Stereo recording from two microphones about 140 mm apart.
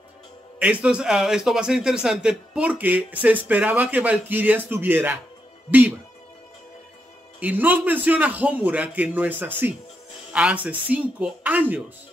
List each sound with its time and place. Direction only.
0.6 s a man's voice: 10° right (ahead or behind)
7.3 s a man's voice: 10° right (ahead or behind)